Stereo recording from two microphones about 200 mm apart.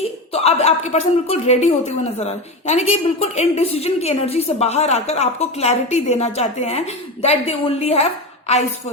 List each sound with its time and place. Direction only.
0.4 s speech: 35° left (ahead or behind)